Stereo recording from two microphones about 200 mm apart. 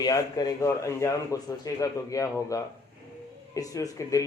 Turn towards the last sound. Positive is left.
turn(degrees=15)  # may be behind; listen again after turning